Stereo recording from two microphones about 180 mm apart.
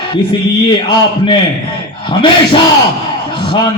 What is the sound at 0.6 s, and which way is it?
Speech, 25° left (ahead or behind).